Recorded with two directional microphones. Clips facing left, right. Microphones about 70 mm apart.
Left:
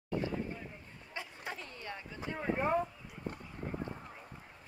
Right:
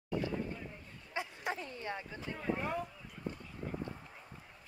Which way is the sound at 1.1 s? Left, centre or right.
Centre.